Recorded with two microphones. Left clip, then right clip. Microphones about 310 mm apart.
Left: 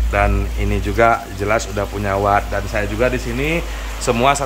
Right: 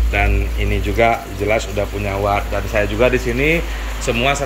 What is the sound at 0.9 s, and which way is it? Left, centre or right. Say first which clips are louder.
Speech: left 1 dB; centre.